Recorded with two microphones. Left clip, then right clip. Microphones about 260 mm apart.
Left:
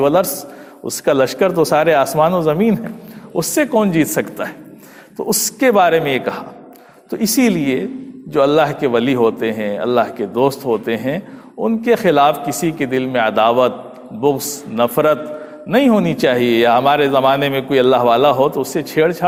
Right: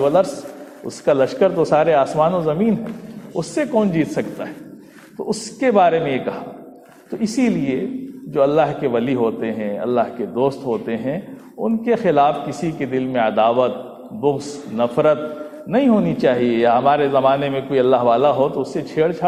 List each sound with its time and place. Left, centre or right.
0.0 s speech: left